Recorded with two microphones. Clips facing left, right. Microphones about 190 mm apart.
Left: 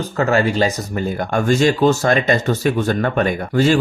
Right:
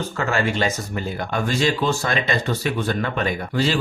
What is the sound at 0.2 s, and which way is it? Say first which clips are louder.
Speech: left 6 dB; 40° left (ahead or behind).